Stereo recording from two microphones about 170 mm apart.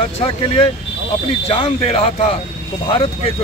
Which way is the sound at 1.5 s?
35° left (ahead or behind).